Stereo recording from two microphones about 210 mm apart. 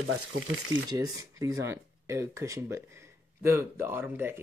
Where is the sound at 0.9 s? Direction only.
15° right (ahead or behind).